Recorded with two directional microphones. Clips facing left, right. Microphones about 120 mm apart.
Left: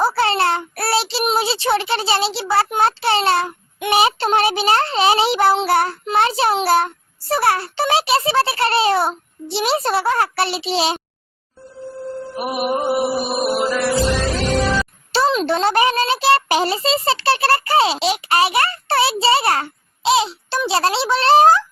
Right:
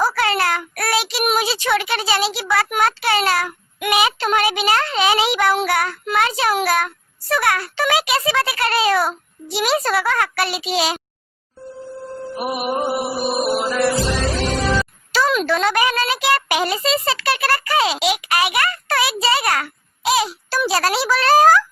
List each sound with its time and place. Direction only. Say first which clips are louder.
0.0 s a child's voice: left 2 dB; 30° left (ahead or behind)
12.4 s music: left 1 dB; centre (ahead or behind)
15.1 s a child's voice: left 1 dB; 30° left (ahead or behind)